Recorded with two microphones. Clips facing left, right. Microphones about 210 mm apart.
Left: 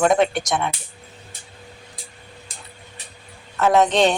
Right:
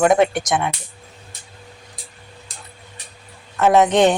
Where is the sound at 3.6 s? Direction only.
20° right (ahead or behind).